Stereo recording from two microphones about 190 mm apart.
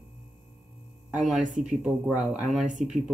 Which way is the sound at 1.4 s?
45° right (ahead or behind).